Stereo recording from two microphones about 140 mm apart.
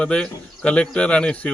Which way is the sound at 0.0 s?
5° left (ahead or behind).